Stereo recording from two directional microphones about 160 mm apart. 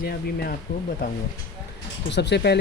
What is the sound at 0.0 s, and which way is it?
Speech, 70° left (ahead or behind).